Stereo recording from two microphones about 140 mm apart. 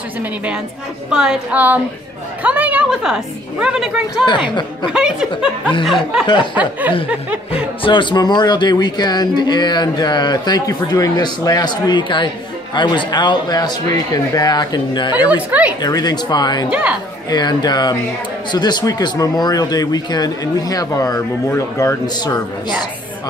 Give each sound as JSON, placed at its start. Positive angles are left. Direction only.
{"t": 1.1, "sound": "a woman's voice", "side_deg": -10}
{"t": 4.5, "sound": "speech", "side_deg": 35}
{"t": 4.9, "sound": "speech", "side_deg": -5}
{"t": 6.5, "sound": "a woman's voice", "side_deg": -10}
{"t": 7.5, "sound": "speech", "side_deg": 35}
{"t": 15.3, "sound": "a woman's voice", "side_deg": -10}
{"t": 15.8, "sound": "speech", "side_deg": 30}